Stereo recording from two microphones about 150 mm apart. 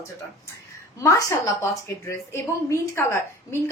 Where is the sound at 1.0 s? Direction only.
20° left (ahead or behind).